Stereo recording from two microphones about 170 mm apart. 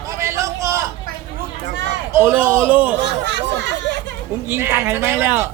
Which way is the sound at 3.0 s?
90° right.